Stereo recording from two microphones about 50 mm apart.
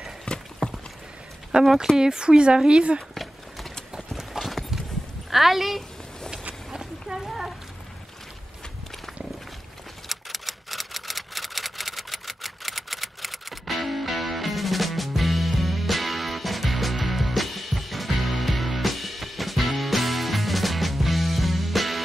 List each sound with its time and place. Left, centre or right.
0.3 s clip-clop: centre
1.5 s speech: centre
3.2 s horse: centre
4.2 s clip-clop: centre
5.3 s a woman's voice: centre
6.7 s a sound: centre
10.0 s typewriter: centre